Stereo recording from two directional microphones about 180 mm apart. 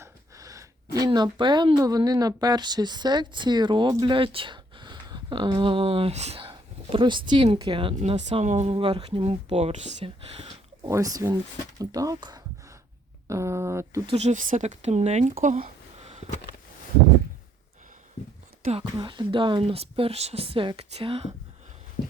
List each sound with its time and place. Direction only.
0.0 s speech: 20° right (ahead or behind)
10.8 s speech: 20° right (ahead or behind)
14.1 s speech: 40° right (ahead or behind)
16.0 s a sound: 35° right (ahead or behind)
18.7 s speech: 25° right (ahead or behind)